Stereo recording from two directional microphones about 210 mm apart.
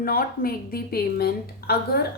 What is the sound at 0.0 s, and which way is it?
A woman's voice, 45° left (ahead or behind).